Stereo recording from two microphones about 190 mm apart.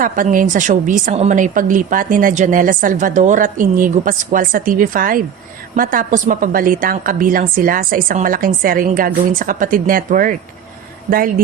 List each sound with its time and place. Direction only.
0.0 s a woman's voice: 45° right (ahead or behind)